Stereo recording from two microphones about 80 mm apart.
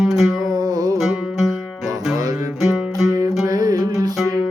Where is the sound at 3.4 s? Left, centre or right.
Right.